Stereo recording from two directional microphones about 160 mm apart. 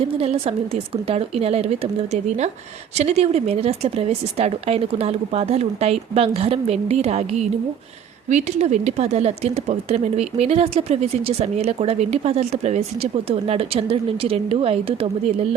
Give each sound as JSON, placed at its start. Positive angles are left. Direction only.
{"t": 0.0, "sound": "speech", "side_deg": -40}
{"t": 3.0, "sound": "speech", "side_deg": -40}